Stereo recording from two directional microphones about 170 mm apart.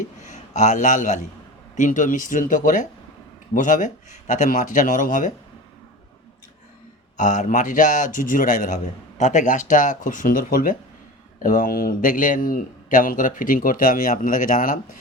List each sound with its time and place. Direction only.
0.3 s a man's voice: 45° left (ahead or behind)
7.2 s a man's voice: 45° left (ahead or behind)